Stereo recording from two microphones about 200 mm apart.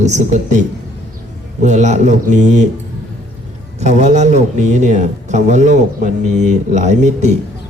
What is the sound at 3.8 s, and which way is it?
Speech, 35° right (ahead or behind).